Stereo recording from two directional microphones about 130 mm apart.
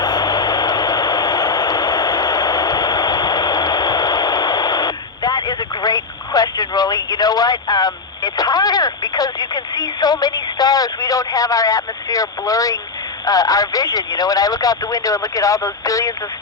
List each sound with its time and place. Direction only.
0.0 s vehicle: 30° left (ahead or behind)
13.2 s speech: 25° left (ahead or behind)